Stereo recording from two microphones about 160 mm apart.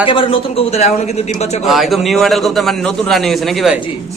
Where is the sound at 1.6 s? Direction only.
Centre (ahead or behind).